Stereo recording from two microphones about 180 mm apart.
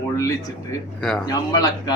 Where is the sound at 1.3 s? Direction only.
20° left (ahead or behind).